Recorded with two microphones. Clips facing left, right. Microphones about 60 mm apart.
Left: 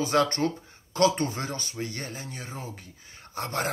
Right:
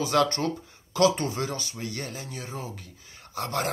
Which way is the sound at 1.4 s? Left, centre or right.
Left.